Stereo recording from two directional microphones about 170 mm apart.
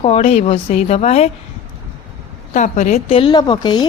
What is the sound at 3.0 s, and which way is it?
Speech, 35° left (ahead or behind).